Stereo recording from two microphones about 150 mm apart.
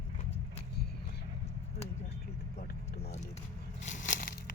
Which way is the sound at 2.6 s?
90° left.